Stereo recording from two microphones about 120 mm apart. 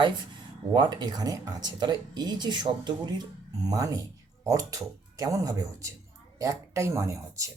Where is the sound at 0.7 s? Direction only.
40° right (ahead or behind).